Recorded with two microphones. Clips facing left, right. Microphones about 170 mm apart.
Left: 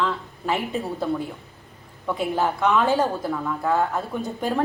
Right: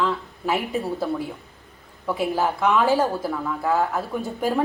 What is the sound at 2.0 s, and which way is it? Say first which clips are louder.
A woman's voice: right 1 dB; 5° right (ahead or behind).